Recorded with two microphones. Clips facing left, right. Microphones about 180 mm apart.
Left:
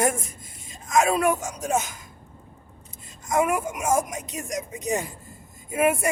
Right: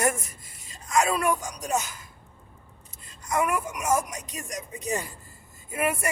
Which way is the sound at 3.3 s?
25° left (ahead or behind).